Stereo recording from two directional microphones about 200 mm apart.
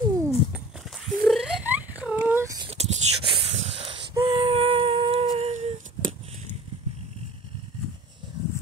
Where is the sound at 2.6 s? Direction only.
30° right (ahead or behind).